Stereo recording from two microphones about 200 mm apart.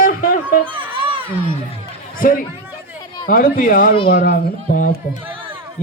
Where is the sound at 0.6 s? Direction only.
25° right (ahead or behind).